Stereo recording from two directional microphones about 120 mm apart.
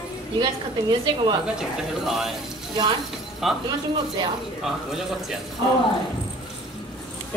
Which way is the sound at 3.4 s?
Centre (ahead or behind).